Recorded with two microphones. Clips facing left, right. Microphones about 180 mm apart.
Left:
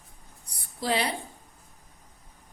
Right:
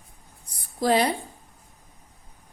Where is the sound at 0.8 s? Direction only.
45° right (ahead or behind).